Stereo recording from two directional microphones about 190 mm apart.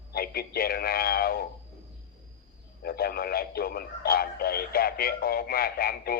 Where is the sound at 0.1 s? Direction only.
55° left (ahead or behind).